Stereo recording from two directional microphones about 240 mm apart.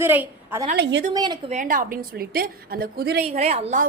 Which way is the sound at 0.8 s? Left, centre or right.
Right.